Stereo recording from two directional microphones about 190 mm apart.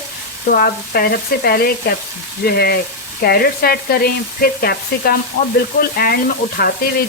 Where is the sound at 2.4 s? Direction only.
55° left (ahead or behind).